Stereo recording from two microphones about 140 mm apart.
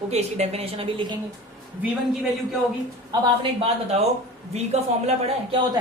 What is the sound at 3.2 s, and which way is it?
A woman's voice, 45° right (ahead or behind).